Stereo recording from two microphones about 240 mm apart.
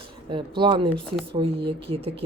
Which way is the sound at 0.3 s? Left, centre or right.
Centre.